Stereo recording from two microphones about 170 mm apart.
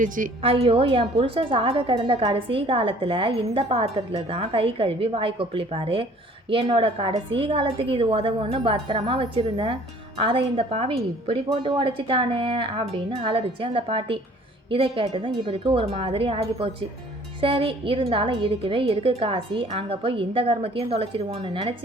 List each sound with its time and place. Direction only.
0.4 s a woman's voice: 35° right (ahead or behind)